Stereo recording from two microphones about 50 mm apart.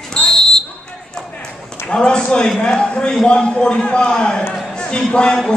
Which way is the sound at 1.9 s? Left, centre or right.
Centre.